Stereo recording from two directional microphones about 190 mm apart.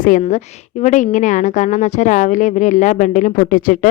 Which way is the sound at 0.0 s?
40° left (ahead or behind).